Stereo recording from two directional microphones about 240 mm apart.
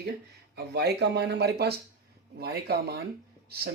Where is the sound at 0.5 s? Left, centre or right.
Right.